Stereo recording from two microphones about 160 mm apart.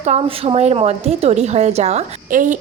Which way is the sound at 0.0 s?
40° right (ahead or behind).